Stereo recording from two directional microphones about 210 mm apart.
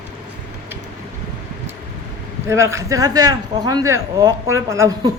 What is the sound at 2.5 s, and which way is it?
Speech, 15° right (ahead or behind).